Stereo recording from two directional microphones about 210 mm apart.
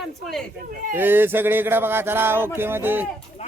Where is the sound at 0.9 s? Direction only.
10° right (ahead or behind).